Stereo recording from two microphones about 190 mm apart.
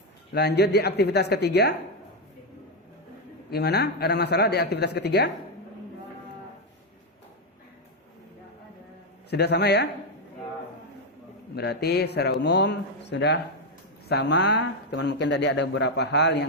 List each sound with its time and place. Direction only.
0.3 s speech: 60° left (ahead or behind)
3.5 s speech: 60° left (ahead or behind)
9.3 s speech: 60° left (ahead or behind)
11.5 s speech: 60° left (ahead or behind)